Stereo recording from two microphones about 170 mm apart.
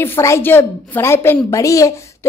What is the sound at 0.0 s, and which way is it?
A woman's voice, 15° left (ahead or behind).